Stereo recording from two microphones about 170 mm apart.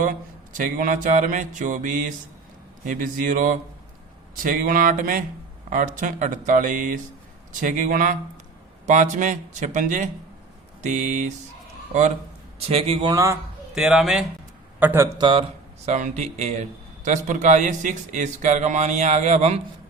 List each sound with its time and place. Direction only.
0.0 s a man's voice: 50° right (ahead or behind)
12.5 s a man's voice: 35° right (ahead or behind)
13.1 s a man's voice: 20° right (ahead or behind)
13.7 s a man's voice: 5° right (ahead or behind)
14.8 s a man's voice: 10° right (ahead or behind)
15.2 s a man's voice: 30° right (ahead or behind)
15.9 s a man's voice: 45° right (ahead or behind)